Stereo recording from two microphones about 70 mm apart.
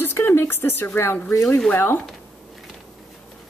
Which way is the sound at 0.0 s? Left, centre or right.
Left.